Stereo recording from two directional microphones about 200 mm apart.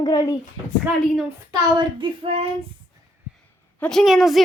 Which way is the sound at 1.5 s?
25° right (ahead or behind).